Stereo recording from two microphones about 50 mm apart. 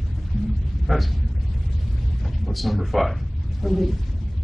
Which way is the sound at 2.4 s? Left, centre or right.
Centre.